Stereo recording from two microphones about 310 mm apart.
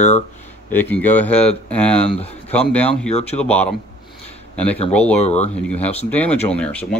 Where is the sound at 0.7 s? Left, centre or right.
Centre.